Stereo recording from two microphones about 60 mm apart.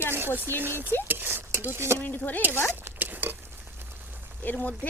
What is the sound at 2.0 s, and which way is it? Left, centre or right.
Speech, left.